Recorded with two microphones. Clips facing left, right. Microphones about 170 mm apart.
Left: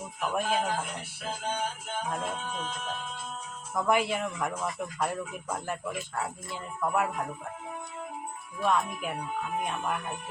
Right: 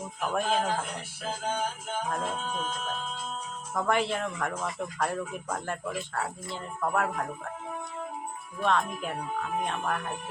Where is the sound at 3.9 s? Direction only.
10° left (ahead or behind).